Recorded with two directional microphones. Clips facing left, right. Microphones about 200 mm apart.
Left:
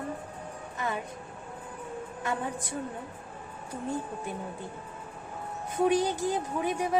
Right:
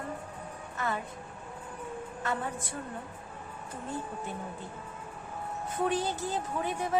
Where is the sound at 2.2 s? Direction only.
15° left (ahead or behind).